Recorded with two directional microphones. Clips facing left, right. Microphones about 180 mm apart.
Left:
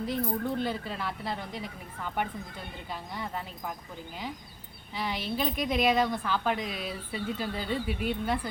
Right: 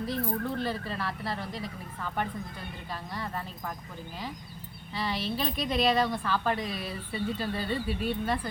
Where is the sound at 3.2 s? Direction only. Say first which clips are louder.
Even; 10° left (ahead or behind).